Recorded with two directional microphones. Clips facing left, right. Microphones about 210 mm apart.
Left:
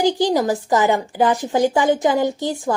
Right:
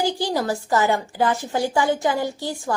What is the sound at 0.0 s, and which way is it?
A woman's voice, 20° left (ahead or behind).